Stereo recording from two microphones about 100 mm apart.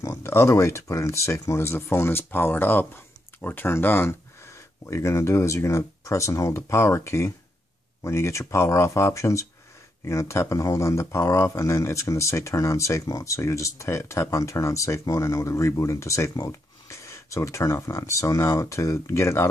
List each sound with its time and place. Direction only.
0.0 s speech: 30° left (ahead or behind)